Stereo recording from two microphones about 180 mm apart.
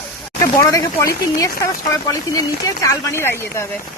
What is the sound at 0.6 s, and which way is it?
Speech, 20° left (ahead or behind).